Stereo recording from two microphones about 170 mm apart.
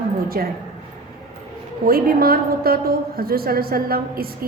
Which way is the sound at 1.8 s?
60° right (ahead or behind).